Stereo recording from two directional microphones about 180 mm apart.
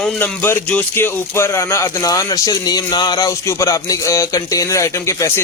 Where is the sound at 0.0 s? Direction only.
5° left (ahead or behind).